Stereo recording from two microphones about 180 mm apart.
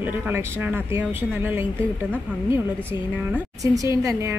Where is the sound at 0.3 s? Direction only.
10° right (ahead or behind).